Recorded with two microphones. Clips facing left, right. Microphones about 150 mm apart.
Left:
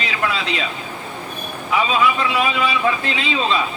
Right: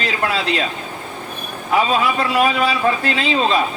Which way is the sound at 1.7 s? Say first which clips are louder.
Right 1 dB; 45° right (ahead or behind).